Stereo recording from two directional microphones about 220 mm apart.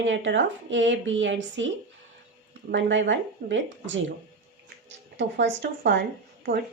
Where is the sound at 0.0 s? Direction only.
55° right (ahead or behind).